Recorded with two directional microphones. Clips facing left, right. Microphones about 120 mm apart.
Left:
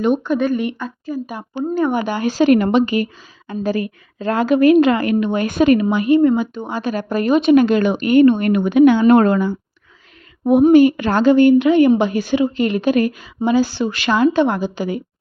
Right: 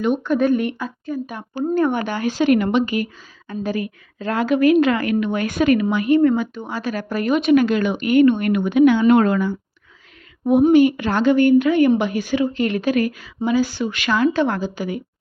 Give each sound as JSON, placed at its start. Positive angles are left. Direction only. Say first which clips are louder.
{"t": 0.3, "sound": "a woman's voice", "louder": "right 1 dB", "side_deg": 0}
{"t": 2.2, "sound": "a woman's voice", "louder": "left 3 dB", "side_deg": 30}
{"t": 7.8, "sound": "a woman's voice", "louder": "left 3 dB", "side_deg": 35}
{"t": 11.2, "sound": "speech", "louder": "left 4 dB", "side_deg": 35}
{"t": 11.4, "sound": "a woman's voice", "louder": "left 3 dB", "side_deg": 20}